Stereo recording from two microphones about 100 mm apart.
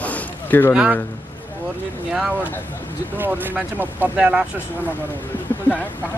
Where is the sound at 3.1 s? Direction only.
20° right (ahead or behind).